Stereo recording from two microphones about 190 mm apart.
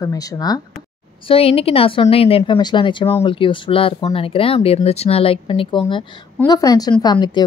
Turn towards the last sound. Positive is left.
turn(degrees=20)  # may be behind; listen again after turning